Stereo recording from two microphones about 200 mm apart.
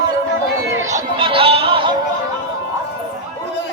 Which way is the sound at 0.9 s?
20° right (ahead or behind).